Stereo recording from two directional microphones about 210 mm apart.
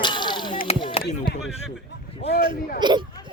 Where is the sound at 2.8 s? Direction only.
20° right (ahead or behind).